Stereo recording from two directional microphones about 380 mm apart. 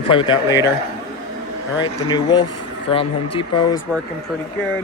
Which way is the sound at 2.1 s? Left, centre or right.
Centre.